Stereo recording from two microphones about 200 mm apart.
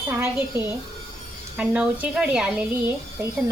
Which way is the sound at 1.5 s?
5° right (ahead or behind).